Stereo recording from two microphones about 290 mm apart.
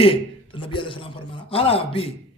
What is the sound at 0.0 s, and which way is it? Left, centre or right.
A man's voice, centre.